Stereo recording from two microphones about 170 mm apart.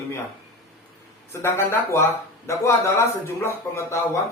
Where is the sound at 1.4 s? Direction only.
15° left (ahead or behind).